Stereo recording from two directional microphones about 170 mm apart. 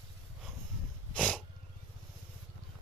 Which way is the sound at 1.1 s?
5° left (ahead or behind).